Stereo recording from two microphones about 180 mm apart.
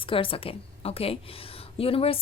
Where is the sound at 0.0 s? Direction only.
30° left (ahead or behind).